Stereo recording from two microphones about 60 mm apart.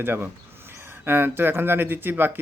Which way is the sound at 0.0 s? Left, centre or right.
Right.